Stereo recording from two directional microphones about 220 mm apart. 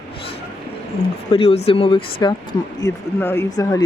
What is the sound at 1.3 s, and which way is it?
Speech, 25° left (ahead or behind).